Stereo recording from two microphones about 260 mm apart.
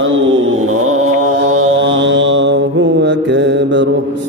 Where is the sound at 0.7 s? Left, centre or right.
Right.